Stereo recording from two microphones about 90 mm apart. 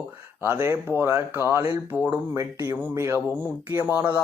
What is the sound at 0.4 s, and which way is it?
Speech, 25° right (ahead or behind).